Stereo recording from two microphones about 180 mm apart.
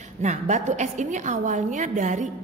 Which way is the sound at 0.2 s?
40° right (ahead or behind).